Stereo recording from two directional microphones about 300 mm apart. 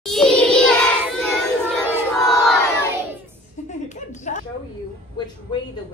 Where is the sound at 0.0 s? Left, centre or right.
Centre.